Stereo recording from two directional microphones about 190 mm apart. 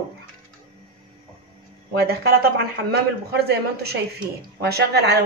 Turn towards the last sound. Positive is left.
turn(degrees=-60)  # may be behind; listen again after turning